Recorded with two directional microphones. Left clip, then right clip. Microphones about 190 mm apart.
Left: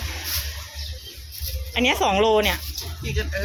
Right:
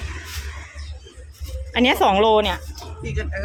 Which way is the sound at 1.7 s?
30° right (ahead or behind).